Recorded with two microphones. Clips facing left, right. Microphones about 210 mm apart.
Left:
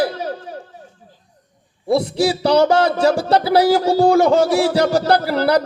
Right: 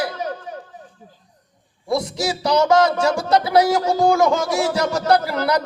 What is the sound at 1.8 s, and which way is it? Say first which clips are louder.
Speech: left 5 dB; 30° left (ahead or behind).